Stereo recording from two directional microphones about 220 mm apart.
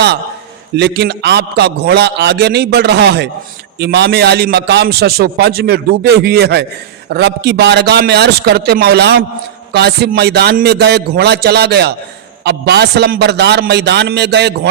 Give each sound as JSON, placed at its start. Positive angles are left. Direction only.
{"t": 0.8, "sound": "a man's voice", "side_deg": -50}